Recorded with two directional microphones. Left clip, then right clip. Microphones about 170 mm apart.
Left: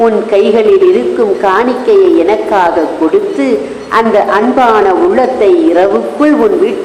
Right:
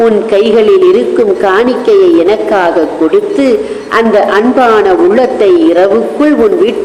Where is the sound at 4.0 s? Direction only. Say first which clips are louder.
Right 1 dB; 30° right (ahead or behind).